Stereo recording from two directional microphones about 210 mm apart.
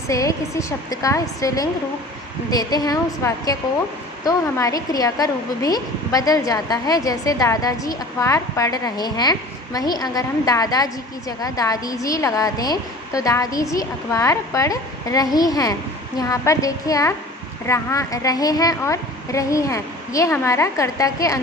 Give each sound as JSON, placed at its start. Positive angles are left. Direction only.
{"t": 0.1, "sound": "a woman's voice", "side_deg": 15}